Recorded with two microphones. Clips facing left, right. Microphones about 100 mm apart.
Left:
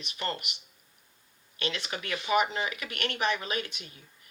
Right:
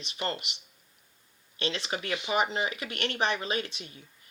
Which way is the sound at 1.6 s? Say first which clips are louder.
Right 2 dB; 30° right (ahead or behind).